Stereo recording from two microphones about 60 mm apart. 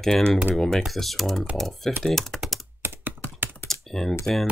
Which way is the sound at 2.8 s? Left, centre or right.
Right.